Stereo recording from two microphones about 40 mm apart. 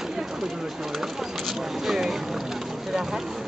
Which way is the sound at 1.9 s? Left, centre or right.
Centre.